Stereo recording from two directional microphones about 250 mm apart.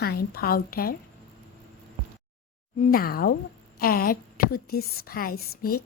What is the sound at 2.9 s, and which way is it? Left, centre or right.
A woman's voice, left.